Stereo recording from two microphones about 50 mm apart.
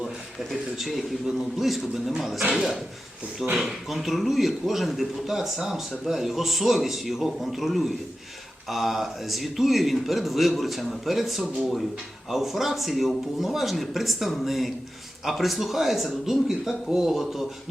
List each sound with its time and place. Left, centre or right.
0.0 s a man's voice: centre